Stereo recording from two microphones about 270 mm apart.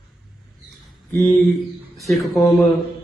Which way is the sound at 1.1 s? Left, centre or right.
Centre.